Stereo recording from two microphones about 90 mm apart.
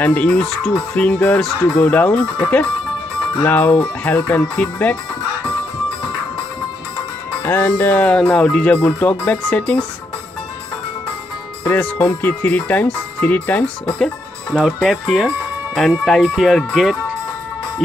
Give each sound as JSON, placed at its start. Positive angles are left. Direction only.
{"t": 0.0, "sound": "speech", "side_deg": 15}
{"t": 7.4, "sound": "speech", "side_deg": 20}
{"t": 11.6, "sound": "speech", "side_deg": 20}
{"t": 13.9, "sound": "music", "side_deg": 5}
{"t": 14.6, "sound": "speech", "side_deg": 0}